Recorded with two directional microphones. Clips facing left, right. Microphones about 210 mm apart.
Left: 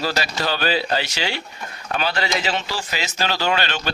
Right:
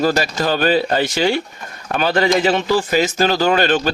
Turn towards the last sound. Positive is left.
turn(degrees=-45)  # may be behind; listen again after turning